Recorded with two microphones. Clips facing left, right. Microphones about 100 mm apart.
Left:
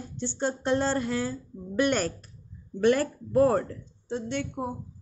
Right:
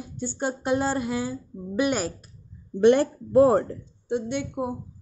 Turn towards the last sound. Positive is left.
turn(degrees=-15)  # may be behind; listen again after turning